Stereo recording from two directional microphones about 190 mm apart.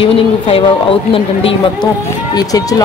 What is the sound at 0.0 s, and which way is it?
Speech, 30° left (ahead or behind).